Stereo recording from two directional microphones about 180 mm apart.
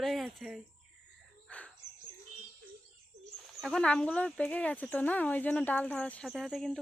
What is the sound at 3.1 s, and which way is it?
Bird, 40° right (ahead or behind).